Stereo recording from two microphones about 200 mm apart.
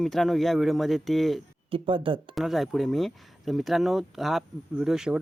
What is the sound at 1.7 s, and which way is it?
Speech, 25° right (ahead or behind).